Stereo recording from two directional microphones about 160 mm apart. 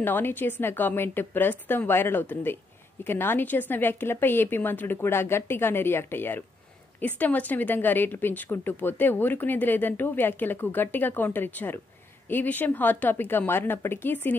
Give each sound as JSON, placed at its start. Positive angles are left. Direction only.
{"t": 0.0, "sound": "a woman's voice", "side_deg": 10}